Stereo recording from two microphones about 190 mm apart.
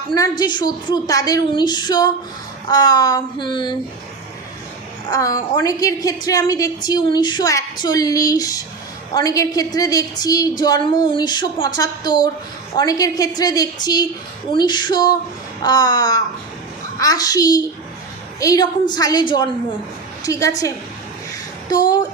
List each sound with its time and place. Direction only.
0.1 s a woman's voice: 20° left (ahead or behind)
5.0 s a woman's voice: 20° left (ahead or behind)
21.7 s a woman's voice: 20° left (ahead or behind)